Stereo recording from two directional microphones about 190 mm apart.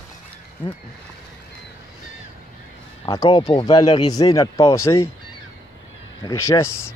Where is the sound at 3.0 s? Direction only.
25° left (ahead or behind).